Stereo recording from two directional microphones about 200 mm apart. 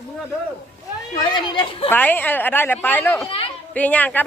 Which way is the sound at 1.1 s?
20° left (ahead or behind).